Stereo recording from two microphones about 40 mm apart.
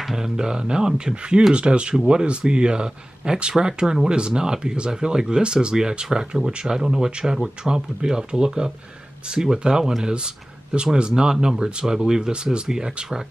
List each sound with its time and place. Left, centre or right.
0.0 s speech: centre
7.3 s speech: centre